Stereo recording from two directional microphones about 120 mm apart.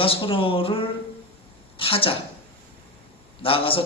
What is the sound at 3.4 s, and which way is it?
Speech, 50° left (ahead or behind).